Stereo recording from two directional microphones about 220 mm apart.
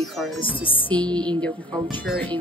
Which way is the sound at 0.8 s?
5° left (ahead or behind).